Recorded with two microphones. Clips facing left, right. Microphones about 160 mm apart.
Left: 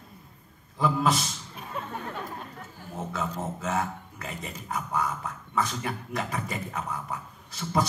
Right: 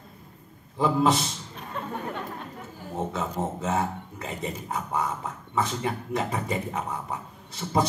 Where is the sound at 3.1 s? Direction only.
25° right (ahead or behind).